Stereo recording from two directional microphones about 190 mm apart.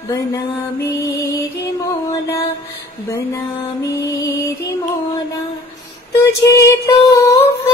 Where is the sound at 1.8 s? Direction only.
15° left (ahead or behind).